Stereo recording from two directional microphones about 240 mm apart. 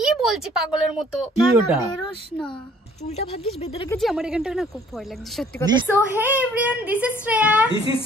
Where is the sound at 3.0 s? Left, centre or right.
Left.